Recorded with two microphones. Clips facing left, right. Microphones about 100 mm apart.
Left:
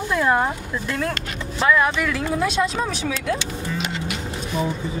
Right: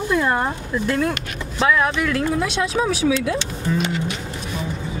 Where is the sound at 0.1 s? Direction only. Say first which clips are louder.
Left 1 dB; centre (ahead or behind).